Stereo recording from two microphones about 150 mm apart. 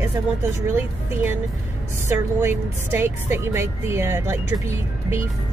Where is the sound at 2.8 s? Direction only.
15° right (ahead or behind).